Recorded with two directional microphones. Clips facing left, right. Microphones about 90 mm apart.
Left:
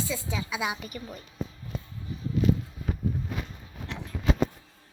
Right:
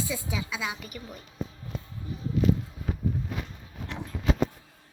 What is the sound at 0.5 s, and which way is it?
Speech, 15° left (ahead or behind).